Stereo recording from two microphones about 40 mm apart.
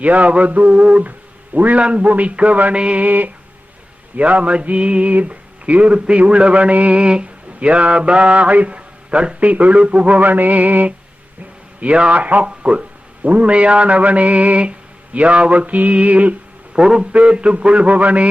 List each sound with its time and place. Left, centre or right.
0.0 s mantra: right
0.8 s a man's voice: right
1.5 s a sound: right
1.8 s a man's voice: right
2.0 s mantra: right
5.1 s a sound: right
9.4 s mantra: right
9.8 s a sound: right
11.8 s mantra: right
16.7 s a man's voice: right
17.2 s mantra: right